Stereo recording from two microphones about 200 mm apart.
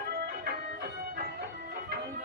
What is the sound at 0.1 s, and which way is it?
Music, 50° right (ahead or behind).